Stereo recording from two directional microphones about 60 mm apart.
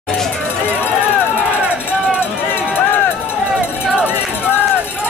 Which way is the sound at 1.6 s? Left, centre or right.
Right.